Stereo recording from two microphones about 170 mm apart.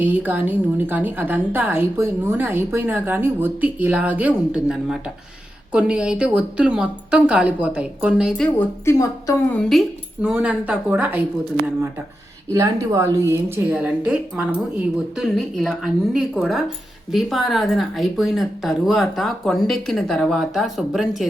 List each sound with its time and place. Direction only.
0.0 s a woman's voice: 10° right (ahead or behind)
8.4 s a woman's voice: 15° left (ahead or behind)
9.6 s a woman's voice: centre (ahead or behind)
12.5 s a woman's voice: 15° right (ahead or behind); by 21.2 s centre (ahead or behind)